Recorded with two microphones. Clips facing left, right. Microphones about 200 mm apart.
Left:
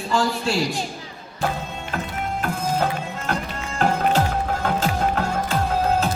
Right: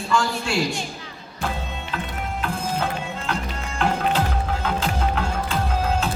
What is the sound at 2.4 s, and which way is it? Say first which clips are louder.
Music: left 3 dB; 45° left (ahead or behind).